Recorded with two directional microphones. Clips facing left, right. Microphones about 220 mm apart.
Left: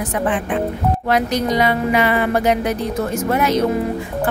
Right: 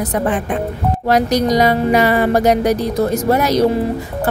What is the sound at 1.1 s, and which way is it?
Music, 40° right (ahead or behind).